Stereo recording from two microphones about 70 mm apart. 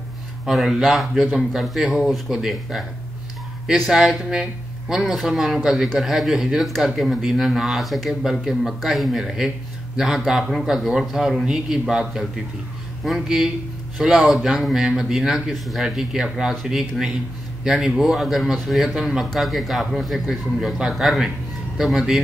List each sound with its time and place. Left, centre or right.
0.5 s speech: centre